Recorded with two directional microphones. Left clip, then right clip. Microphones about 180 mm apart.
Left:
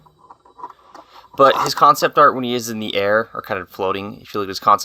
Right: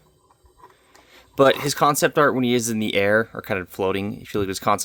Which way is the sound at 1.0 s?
50° right (ahead or behind).